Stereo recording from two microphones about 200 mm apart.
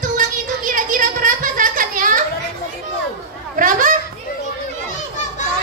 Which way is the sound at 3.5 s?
45° right (ahead or behind).